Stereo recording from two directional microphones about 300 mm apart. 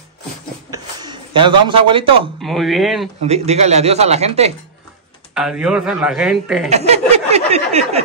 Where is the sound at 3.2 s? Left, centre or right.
Right.